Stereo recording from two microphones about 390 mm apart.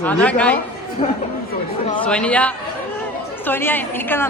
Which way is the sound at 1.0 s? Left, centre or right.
Centre.